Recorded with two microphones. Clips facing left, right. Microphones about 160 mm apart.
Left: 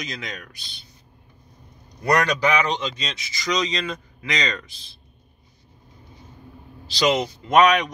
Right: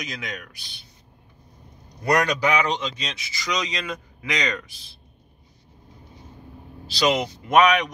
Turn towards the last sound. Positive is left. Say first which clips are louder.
# left 1 dB
turn(degrees=-5)  # may be behind; listen again after turning